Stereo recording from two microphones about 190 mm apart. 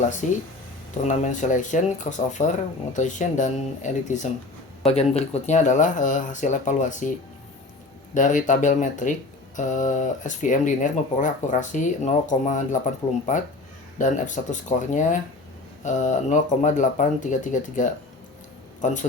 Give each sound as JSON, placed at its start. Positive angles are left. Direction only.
{"t": 0.2, "sound": "speech", "side_deg": 40}
{"t": 8.1, "sound": "speech", "side_deg": 40}